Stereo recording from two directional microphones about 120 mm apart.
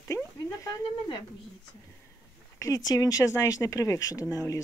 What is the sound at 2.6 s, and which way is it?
Speech, 30° left (ahead or behind).